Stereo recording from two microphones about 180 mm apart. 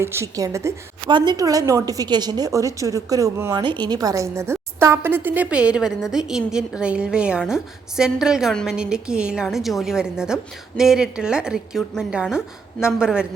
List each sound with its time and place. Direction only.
0.0 s a woman's voice: 15° right (ahead or behind)